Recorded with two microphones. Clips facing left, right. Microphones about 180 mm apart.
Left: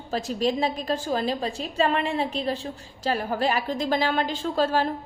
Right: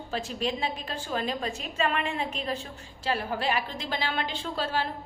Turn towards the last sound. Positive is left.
turn(degrees=45)  # may be behind; listen again after turning